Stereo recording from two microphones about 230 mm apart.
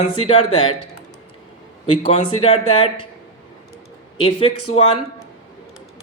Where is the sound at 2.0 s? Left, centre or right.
Left.